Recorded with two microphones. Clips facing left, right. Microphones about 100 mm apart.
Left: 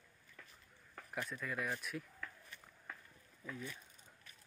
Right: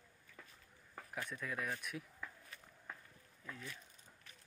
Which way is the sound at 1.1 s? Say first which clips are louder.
Left 1 dB; centre (ahead or behind).